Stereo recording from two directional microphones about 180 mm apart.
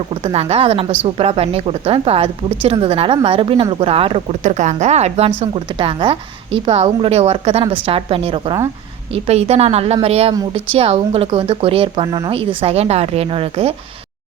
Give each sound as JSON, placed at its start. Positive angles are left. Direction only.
{"t": 0.1, "sound": "a woman's voice", "side_deg": -30}